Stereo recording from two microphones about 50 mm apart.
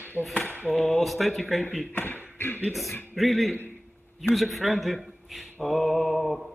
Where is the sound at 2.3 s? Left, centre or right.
Left.